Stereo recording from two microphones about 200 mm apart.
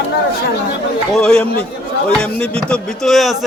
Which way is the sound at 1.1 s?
5° left (ahead or behind).